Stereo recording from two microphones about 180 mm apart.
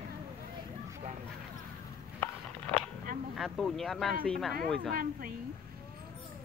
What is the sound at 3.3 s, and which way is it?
Speech, centre (ahead or behind).